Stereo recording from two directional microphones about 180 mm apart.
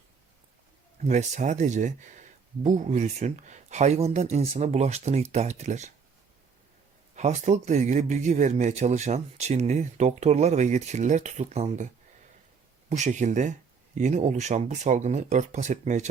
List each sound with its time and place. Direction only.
1.0 s speech: 40° right (ahead or behind)
7.2 s speech: 40° right (ahead or behind)
12.9 s speech: 40° right (ahead or behind)